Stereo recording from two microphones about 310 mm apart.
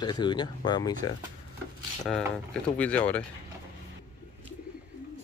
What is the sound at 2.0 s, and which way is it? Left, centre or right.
Speech, centre.